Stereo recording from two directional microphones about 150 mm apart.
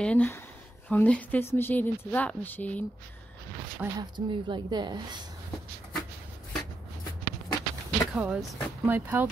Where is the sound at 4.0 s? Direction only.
30° right (ahead or behind).